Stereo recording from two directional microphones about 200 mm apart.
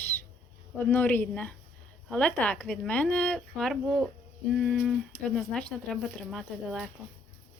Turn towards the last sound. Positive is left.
turn(degrees=0)  # may be behind; listen again after turning